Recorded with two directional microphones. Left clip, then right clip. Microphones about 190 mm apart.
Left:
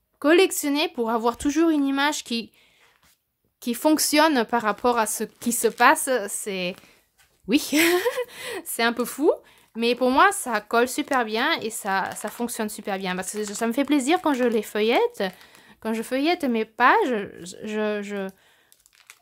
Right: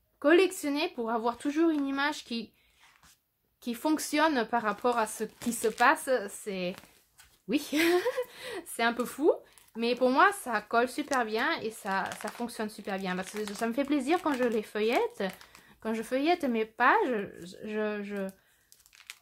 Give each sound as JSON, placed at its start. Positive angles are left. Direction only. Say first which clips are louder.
{"t": 0.2, "sound": "speech", "louder": "left 5 dB", "side_deg": 35}
{"t": 3.6, "sound": "speech", "louder": "left 9 dB", "side_deg": 40}